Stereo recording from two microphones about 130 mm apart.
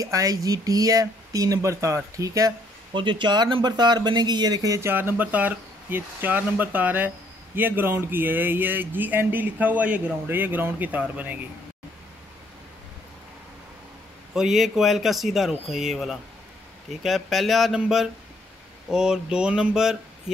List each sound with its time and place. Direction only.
0.0 s speech: 25° right (ahead or behind)
2.9 s speech: 40° right (ahead or behind); by 11.3 s 10° right (ahead or behind)
14.3 s speech: 5° right (ahead or behind)